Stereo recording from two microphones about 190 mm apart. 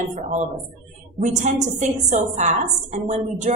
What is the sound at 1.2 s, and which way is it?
A woman's voice, 40° right (ahead or behind).